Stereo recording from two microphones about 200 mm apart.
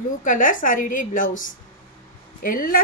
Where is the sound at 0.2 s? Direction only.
40° left (ahead or behind).